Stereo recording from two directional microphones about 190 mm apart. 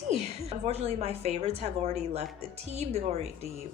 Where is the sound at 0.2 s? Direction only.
35° right (ahead or behind).